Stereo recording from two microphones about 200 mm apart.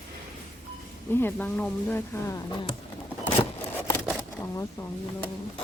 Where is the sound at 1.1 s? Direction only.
10° left (ahead or behind).